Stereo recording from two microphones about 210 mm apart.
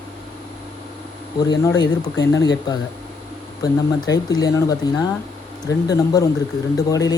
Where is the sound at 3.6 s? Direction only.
20° left (ahead or behind).